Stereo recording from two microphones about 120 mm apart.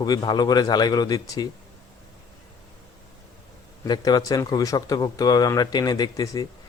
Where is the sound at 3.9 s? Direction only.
35° left (ahead or behind).